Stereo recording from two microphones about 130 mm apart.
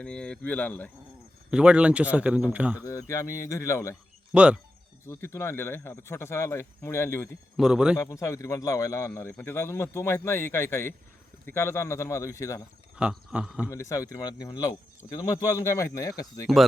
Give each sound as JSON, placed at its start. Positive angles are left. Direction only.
{"t": 0.0, "sound": "speech", "side_deg": 10}
{"t": 1.5, "sound": "speech", "side_deg": -10}
{"t": 2.8, "sound": "speech", "side_deg": 25}
{"t": 4.3, "sound": "speech", "side_deg": -5}
{"t": 5.0, "sound": "speech", "side_deg": 20}
{"t": 7.5, "sound": "speech", "side_deg": -5}
{"t": 7.9, "sound": "speech", "side_deg": 25}
{"t": 13.0, "sound": "speech", "side_deg": -10}
{"t": 13.7, "sound": "speech", "side_deg": 25}